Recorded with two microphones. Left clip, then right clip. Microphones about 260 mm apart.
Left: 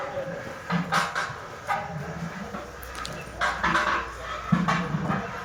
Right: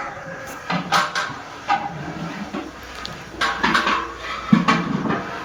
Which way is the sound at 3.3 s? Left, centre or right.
Right.